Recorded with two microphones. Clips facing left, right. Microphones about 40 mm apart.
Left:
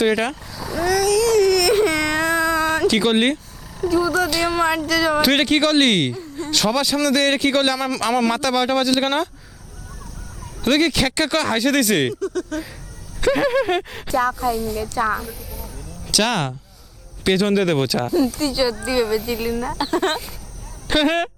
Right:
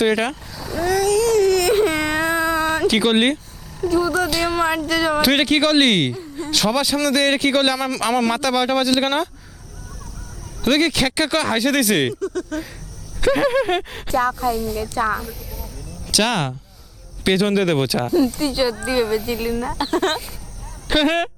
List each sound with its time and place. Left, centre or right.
0.0 s speech: centre
0.9 s baby cry: centre
3.8 s speech: centre
10.6 s speech: centre
19.2 s speech: centre